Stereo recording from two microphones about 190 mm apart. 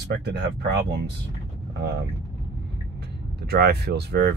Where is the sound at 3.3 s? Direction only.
55° right (ahead or behind).